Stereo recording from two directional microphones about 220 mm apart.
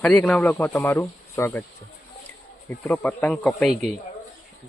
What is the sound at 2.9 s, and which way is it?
Speech, 5° left (ahead or behind).